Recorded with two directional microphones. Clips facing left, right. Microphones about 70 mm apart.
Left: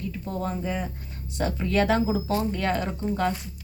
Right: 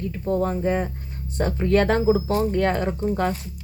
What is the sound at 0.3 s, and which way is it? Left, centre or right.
A woman's voice, right.